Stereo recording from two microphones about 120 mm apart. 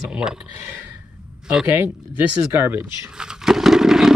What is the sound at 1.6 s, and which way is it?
Speech, 20° right (ahead or behind).